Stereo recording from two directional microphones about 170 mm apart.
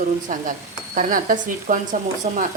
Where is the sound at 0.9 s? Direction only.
55° right (ahead or behind).